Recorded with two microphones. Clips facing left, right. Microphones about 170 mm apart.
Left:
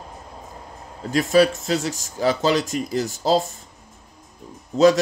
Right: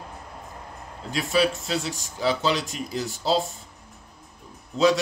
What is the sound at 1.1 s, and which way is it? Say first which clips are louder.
Speech: left 6 dB; 45° left (ahead or behind).